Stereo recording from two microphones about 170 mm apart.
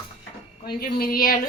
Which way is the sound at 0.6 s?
65° left (ahead or behind).